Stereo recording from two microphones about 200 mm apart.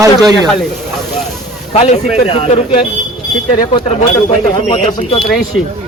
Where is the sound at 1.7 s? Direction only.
35° left (ahead or behind).